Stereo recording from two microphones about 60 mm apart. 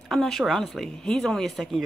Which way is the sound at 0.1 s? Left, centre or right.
Centre.